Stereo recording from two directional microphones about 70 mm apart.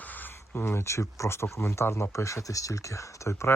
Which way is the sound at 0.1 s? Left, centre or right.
Left.